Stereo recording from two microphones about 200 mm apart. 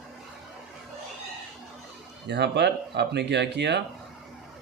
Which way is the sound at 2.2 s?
55° right (ahead or behind).